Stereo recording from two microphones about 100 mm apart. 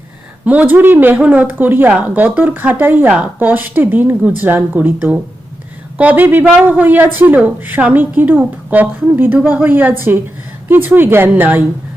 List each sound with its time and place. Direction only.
0.4 s speech: 15° right (ahead or behind)